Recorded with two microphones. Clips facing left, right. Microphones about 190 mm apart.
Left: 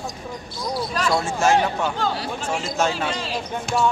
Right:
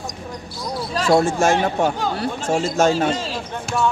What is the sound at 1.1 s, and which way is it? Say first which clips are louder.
Speech: right 3 dB; 50° right (ahead or behind).